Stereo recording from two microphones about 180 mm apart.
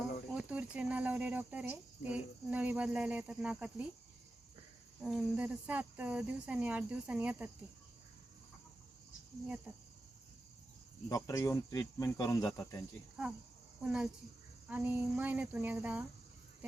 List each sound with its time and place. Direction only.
0.3 s speech: 5° right (ahead or behind)
4.9 s speech: 5° right (ahead or behind)
11.1 s speech: 20° left (ahead or behind)
13.8 s speech: 5° right (ahead or behind)